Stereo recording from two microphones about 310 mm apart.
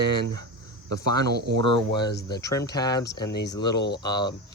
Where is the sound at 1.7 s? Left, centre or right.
Centre.